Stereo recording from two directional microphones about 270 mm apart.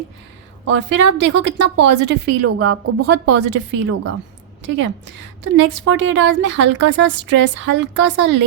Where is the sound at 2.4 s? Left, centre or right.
Right.